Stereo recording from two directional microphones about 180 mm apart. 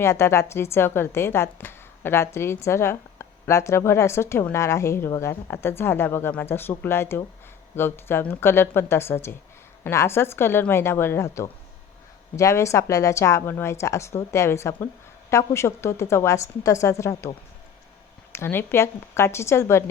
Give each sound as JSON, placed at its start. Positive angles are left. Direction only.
{"t": 0.0, "sound": "a woman's voice", "side_deg": 15}